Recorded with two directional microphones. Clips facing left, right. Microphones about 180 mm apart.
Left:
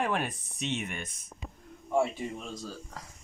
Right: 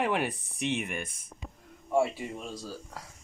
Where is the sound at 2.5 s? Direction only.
10° right (ahead or behind).